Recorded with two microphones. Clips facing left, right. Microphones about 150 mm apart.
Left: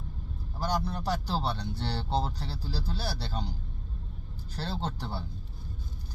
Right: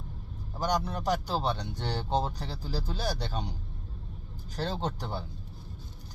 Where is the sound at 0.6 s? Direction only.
15° right (ahead or behind).